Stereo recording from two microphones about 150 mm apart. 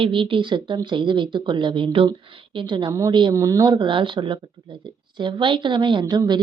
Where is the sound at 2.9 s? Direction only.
20° right (ahead or behind).